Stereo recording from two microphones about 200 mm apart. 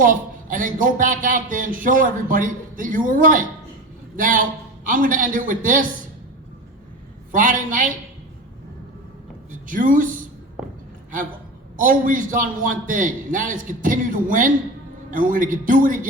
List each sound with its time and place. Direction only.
0.0 s speech: 40° right (ahead or behind)
7.3 s speech: 40° right (ahead or behind)
9.5 s a woman's voice: 40° right (ahead or behind)
11.8 s speech: 40° right (ahead or behind)